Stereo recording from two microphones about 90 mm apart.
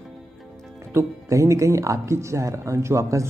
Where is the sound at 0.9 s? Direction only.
35° right (ahead or behind).